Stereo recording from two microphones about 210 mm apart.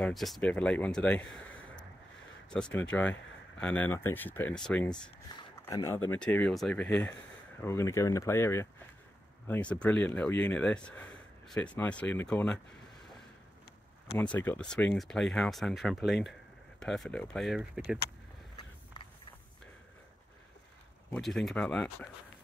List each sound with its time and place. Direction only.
0.0 s speech: centre (ahead or behind)
2.5 s speech: 5° left (ahead or behind)
5.7 s speech: 15° left (ahead or behind)
14.1 s speech: 10° left (ahead or behind)
21.1 s speech: centre (ahead or behind)